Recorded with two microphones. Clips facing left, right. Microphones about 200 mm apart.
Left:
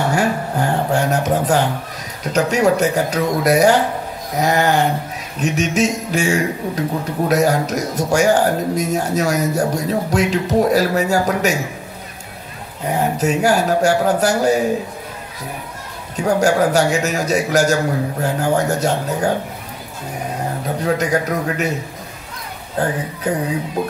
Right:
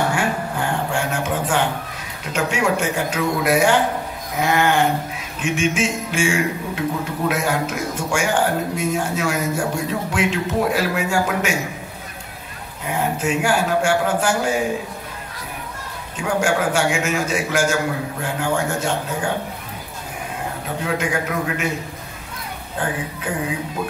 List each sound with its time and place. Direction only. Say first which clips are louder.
0.1 s a sound: left 4 dB; 40° left (ahead or behind)
2.2 s a man's voice: left 6 dB; 40° left (ahead or behind)
12.8 s a man's voice: left 4 dB; 40° left (ahead or behind)
16.2 s a man's voice: left 5 dB; 40° left (ahead or behind)
20.8 s a man's voice: left 5 dB; 40° left (ahead or behind)
22.8 s a man's voice: left 5 dB; 40° left (ahead or behind)